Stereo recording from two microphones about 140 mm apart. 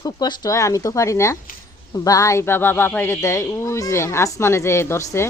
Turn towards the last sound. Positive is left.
turn(degrees=20)  # may be behind; listen again after turning